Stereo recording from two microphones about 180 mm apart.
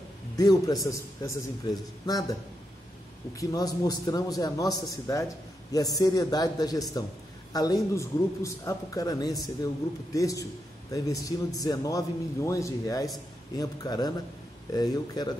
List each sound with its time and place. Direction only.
0.4 s a man's voice: 20° left (ahead or behind)
3.3 s a man's voice: 20° left (ahead or behind)